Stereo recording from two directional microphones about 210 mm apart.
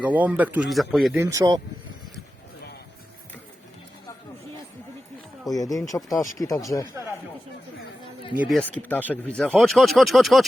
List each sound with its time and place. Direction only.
0.0 s a man's voice: 10° right (ahead or behind)
1.1 s a man's voice: 15° right (ahead or behind)
5.5 s speech: 15° left (ahead or behind)
8.4 s speech: centre (ahead or behind)